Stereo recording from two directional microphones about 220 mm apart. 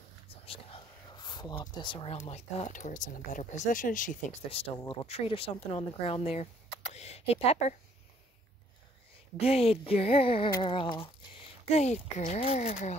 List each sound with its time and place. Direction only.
0.3 s speech: 25° left (ahead or behind)
9.4 s speech: 25° left (ahead or behind)